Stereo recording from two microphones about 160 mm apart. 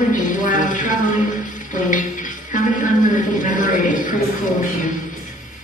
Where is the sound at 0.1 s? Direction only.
55° left (ahead or behind).